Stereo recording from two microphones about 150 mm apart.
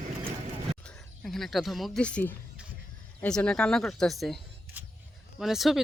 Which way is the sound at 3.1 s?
5° left (ahead or behind).